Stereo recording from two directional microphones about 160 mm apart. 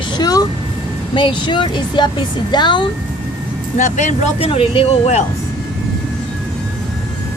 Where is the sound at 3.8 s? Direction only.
50° left (ahead or behind).